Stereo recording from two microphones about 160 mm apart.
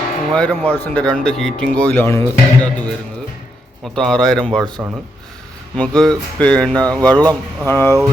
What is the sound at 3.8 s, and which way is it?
Speech, 5° left (ahead or behind).